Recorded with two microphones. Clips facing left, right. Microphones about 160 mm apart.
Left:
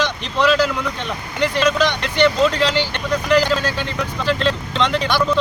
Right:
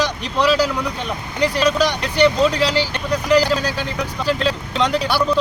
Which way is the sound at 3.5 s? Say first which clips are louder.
Even; 10° right (ahead or behind).